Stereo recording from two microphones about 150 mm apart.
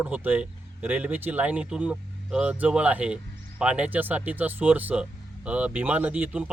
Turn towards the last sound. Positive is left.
turn(degrees=-10)  # may be behind; listen again after turning